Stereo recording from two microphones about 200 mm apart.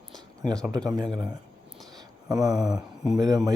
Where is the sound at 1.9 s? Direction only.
20° right (ahead or behind).